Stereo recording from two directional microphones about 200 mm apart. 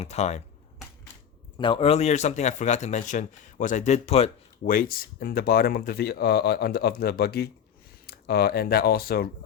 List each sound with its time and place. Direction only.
0.0 s speech: 35° left (ahead or behind)
1.5 s speech: 25° left (ahead or behind)
4.6 s speech: 45° left (ahead or behind)